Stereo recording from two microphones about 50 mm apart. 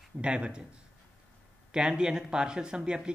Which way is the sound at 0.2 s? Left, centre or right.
Right.